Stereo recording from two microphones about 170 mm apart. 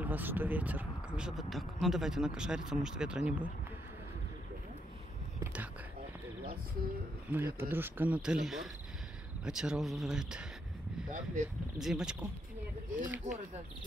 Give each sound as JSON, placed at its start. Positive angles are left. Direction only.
{"t": 0.0, "sound": "speech", "side_deg": -10}
{"t": 5.4, "sound": "speech", "side_deg": -10}
{"t": 7.2, "sound": "speech", "side_deg": -15}
{"t": 11.1, "sound": "speech", "side_deg": -50}
{"t": 11.8, "sound": "speech", "side_deg": -5}
{"t": 13.3, "sound": "speech", "side_deg": -45}